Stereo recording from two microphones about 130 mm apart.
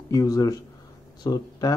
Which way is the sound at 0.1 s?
25° left (ahead or behind).